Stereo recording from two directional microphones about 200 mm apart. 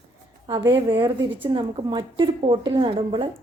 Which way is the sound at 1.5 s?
25° right (ahead or behind).